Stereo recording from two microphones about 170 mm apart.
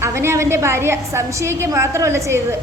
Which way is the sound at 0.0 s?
15° right (ahead or behind).